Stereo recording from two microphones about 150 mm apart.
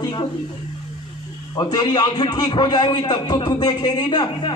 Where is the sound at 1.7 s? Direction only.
30° left (ahead or behind).